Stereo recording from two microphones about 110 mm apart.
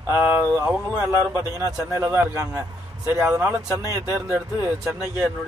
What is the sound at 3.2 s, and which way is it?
Speech, 10° right (ahead or behind).